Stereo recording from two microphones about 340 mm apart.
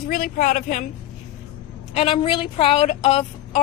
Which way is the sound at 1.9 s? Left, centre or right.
Centre.